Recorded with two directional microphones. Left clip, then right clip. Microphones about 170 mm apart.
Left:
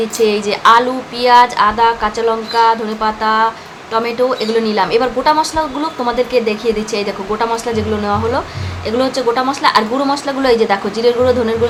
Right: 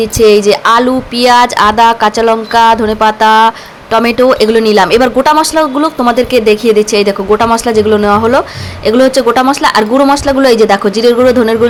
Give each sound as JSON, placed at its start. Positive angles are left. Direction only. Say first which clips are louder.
{"t": 0.2, "sound": "speech", "louder": "right 8 dB", "side_deg": -35}